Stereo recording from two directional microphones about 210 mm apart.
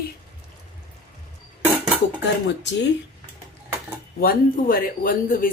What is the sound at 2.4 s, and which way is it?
Speech, 55° left (ahead or behind).